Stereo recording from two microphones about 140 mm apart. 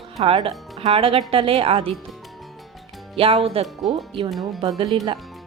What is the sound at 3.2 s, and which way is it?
Speech, 40° right (ahead or behind).